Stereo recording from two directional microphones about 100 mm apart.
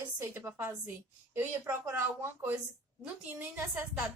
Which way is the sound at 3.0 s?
10° right (ahead or behind).